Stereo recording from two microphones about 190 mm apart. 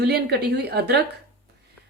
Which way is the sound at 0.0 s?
60° right (ahead or behind).